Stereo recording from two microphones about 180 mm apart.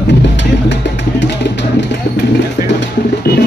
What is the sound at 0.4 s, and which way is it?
Music, 80° left.